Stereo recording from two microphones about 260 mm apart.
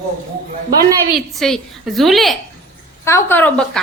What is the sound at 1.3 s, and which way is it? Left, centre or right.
A woman's voice, centre.